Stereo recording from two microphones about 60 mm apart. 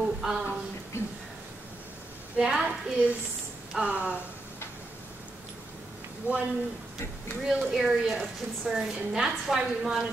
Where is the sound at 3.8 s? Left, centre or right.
Right.